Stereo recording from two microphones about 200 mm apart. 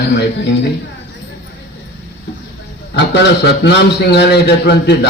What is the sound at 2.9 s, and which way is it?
A man's voice, 65° left (ahead or behind).